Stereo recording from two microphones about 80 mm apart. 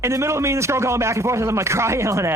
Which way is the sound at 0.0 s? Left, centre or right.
Right.